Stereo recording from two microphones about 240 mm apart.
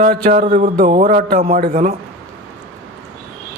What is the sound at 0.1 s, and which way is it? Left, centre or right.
A man's voice, right.